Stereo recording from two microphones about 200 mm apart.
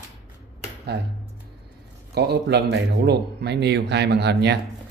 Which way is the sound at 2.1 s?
55° right (ahead or behind).